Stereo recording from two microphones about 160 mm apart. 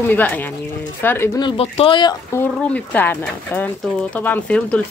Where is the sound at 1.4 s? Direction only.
35° left (ahead or behind).